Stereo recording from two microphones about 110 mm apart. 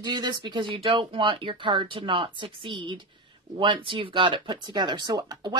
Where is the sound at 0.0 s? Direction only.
45° right (ahead or behind).